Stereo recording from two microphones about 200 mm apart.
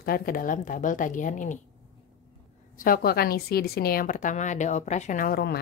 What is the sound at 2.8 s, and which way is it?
Speech, 45° left (ahead or behind).